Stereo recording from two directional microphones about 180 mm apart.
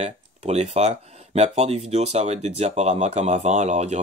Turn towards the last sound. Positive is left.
turn(degrees=-40)  # may be behind; listen again after turning